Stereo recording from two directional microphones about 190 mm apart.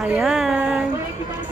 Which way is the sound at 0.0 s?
5° right (ahead or behind).